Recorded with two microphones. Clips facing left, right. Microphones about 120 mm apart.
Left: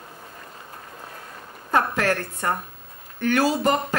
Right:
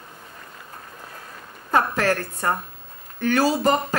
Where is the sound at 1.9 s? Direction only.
35° right (ahead or behind).